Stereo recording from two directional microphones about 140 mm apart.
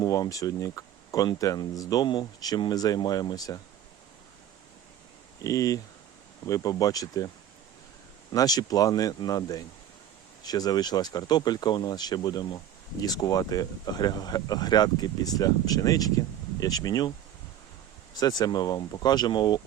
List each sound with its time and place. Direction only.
0.0 s speech: 25° left (ahead or behind)
5.4 s speech: 25° left (ahead or behind)
8.3 s speech: 30° left (ahead or behind)
18.2 s speech: 25° left (ahead or behind)